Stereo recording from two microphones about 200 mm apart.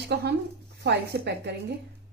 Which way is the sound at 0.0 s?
55° right (ahead or behind).